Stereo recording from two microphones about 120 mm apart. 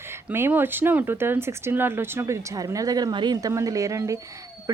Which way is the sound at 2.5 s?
30° right (ahead or behind).